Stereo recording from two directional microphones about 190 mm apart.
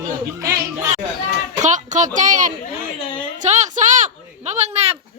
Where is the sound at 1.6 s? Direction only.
40° right (ahead or behind).